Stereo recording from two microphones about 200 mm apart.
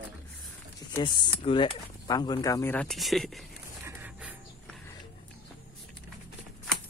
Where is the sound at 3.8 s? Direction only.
10° right (ahead or behind).